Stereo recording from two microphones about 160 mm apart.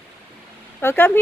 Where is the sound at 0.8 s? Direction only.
15° left (ahead or behind).